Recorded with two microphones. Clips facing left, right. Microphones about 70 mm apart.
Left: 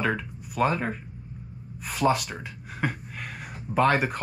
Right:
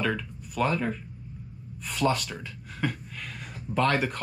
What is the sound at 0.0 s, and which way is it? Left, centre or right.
Speech, left.